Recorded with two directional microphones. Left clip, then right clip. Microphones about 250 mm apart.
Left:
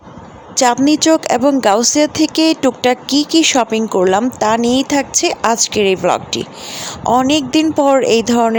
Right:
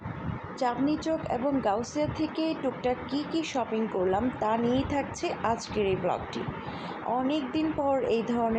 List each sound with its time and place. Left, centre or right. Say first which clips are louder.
0.5 s speech: left 16 dB; left